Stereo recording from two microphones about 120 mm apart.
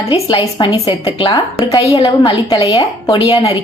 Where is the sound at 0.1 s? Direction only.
40° left (ahead or behind).